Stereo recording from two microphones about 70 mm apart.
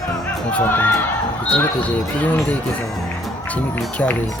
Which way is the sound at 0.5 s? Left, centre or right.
Left.